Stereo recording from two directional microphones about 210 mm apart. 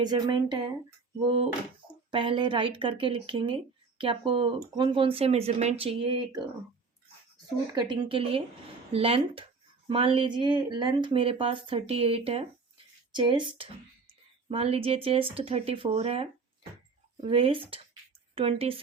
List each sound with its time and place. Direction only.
0.0 s speech: 20° right (ahead or behind)
2.0 s speech: 25° right (ahead or behind)
7.8 s speech: 25° right (ahead or behind)